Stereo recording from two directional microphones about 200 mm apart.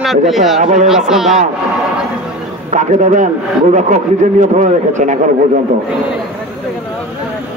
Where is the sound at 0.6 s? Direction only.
35° right (ahead or behind).